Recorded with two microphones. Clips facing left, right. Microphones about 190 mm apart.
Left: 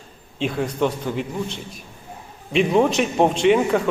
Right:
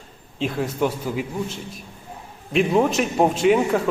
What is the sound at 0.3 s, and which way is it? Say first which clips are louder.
A man's voice: left 1 dB; centre (ahead or behind).